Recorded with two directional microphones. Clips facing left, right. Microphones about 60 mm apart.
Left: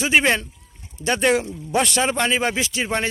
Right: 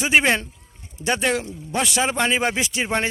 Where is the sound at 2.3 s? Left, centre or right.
Right.